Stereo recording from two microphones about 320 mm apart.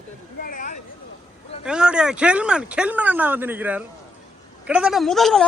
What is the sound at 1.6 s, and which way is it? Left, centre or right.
Speech, centre.